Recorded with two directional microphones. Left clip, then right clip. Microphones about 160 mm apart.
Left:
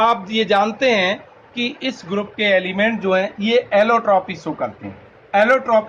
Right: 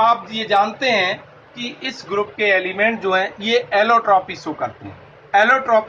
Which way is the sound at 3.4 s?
90° left.